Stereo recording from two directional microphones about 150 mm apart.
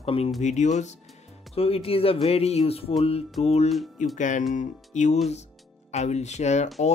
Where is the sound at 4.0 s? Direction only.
55° left (ahead or behind).